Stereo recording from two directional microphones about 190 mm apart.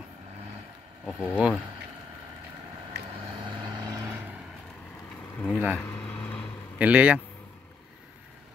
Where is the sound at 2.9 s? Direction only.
60° right (ahead or behind).